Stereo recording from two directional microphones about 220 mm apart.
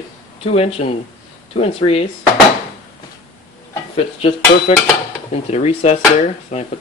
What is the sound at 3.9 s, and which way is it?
Speech, 25° left (ahead or behind).